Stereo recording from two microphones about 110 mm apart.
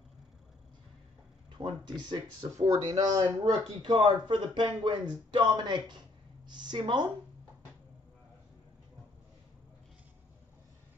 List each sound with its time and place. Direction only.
1.6 s speech: 45° right (ahead or behind)
3.8 s speech: 50° right (ahead or behind)